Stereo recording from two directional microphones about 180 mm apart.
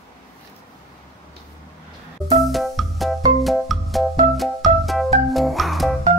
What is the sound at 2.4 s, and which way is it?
Music, centre (ahead or behind).